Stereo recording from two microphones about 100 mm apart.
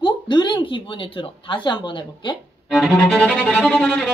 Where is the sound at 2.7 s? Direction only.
5° right (ahead or behind).